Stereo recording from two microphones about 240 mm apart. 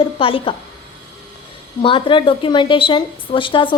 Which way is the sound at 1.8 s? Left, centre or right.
Left.